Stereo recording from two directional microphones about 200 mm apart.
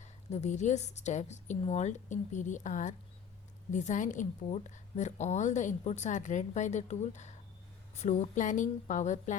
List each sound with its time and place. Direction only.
0.0 s a woman's voice: 35° left (ahead or behind)